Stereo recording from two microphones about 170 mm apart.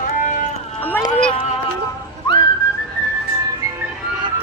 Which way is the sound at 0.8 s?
10° left (ahead or behind).